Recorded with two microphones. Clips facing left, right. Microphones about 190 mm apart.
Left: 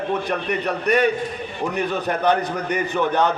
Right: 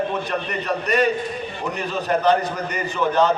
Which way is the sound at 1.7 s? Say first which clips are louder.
Right 1 dB; 60° left (ahead or behind).